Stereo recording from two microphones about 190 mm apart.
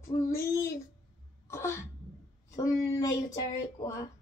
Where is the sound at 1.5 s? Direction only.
15° left (ahead or behind).